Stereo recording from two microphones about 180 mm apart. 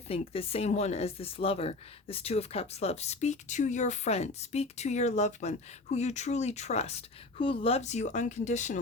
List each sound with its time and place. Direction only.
0.1 s speech: 35° left (ahead or behind)